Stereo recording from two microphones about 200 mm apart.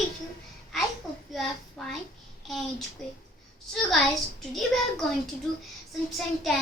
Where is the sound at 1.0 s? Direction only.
Centre (ahead or behind).